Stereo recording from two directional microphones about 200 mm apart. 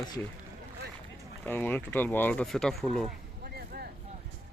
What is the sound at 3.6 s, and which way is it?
Vehicle, 50° right (ahead or behind).